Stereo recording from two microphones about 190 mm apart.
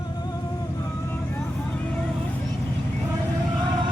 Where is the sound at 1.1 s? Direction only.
5° left (ahead or behind).